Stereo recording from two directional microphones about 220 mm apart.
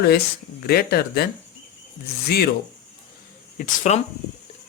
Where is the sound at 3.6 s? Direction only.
30° left (ahead or behind).